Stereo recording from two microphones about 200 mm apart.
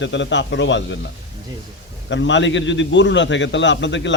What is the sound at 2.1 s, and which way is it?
A man's voice, 65° left (ahead or behind).